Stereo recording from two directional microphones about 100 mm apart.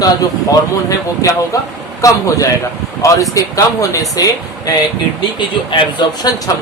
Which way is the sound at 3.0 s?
30° left (ahead or behind).